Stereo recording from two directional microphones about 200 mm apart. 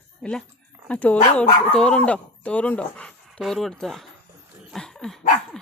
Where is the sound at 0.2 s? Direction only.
5° left (ahead or behind).